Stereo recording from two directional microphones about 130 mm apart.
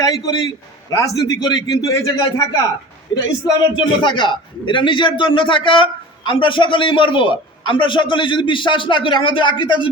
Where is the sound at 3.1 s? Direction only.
35° left (ahead or behind).